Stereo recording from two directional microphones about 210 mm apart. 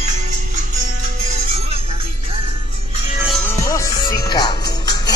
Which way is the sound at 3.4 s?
15° left (ahead or behind).